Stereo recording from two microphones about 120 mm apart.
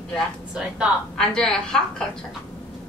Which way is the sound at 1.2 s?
5° left (ahead or behind).